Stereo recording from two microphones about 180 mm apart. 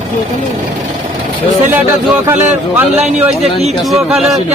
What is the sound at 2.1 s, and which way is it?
Speech, 10° right (ahead or behind).